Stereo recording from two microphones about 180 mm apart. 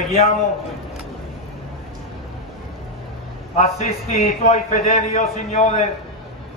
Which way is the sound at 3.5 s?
35° left (ahead or behind).